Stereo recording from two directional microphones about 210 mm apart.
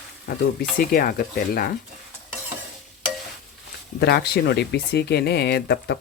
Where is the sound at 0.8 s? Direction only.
45° left (ahead or behind).